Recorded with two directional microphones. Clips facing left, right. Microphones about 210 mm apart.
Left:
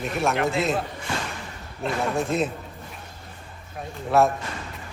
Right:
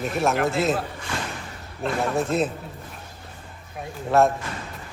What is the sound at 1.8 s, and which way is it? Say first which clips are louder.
Speech: right 1 dB; centre (ahead or behind).